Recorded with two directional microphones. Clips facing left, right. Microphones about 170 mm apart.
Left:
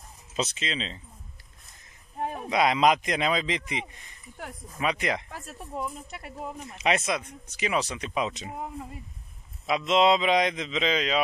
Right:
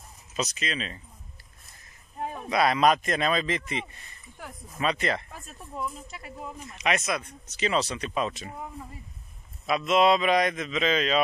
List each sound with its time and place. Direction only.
0.4 s a man's voice: 25° left (ahead or behind)
2.5 s a man's voice: 15° left (ahead or behind)
6.0 s speech: 60° left (ahead or behind)
6.7 s a man's voice: 30° left (ahead or behind)
7.2 s a man's voice: 15° left (ahead or behind)
9.7 s a man's voice: 20° left (ahead or behind)